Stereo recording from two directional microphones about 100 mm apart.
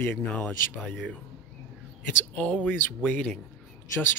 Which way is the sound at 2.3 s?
15° left (ahead or behind).